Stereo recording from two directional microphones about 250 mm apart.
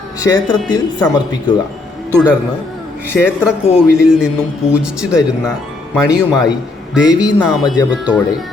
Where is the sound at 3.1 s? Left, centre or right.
Centre.